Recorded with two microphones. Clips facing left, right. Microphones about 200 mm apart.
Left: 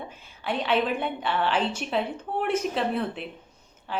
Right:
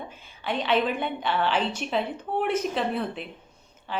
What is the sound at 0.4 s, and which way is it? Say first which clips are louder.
Speech: even; 5° left (ahead or behind).